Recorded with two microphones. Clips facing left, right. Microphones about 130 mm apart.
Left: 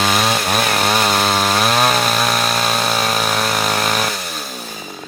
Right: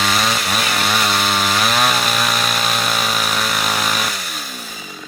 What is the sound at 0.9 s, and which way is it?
Chainsaw, 40° left (ahead or behind).